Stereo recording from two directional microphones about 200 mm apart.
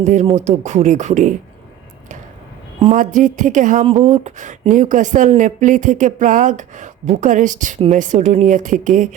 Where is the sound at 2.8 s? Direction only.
40° right (ahead or behind).